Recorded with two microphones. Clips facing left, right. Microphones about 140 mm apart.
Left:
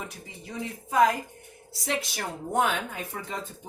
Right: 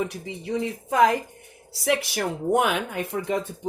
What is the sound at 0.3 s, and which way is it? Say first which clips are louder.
A woman's voice: right 9 dB; 80° right.